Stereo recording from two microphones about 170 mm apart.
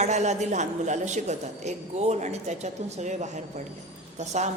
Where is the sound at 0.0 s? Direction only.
45° right (ahead or behind).